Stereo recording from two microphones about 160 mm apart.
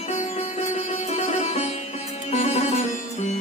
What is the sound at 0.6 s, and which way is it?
Music, 45° left (ahead or behind).